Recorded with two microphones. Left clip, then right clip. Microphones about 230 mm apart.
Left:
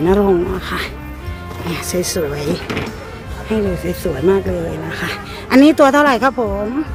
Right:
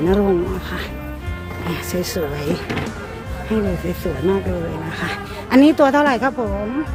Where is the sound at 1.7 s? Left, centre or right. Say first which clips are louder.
Left 4 dB; centre.